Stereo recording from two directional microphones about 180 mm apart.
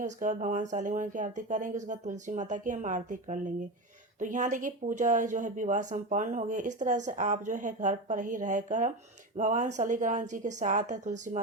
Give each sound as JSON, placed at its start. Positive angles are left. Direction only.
{"t": 0.0, "sound": "a woman's voice", "side_deg": -45}